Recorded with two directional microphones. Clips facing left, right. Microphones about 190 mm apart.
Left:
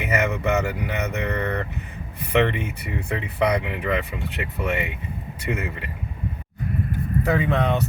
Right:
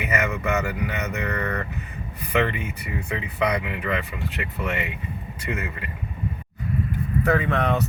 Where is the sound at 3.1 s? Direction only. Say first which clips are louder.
Left 3 dB; 25° left (ahead or behind).